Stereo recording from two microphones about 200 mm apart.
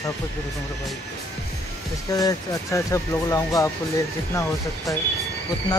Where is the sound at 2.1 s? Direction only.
15° left (ahead or behind).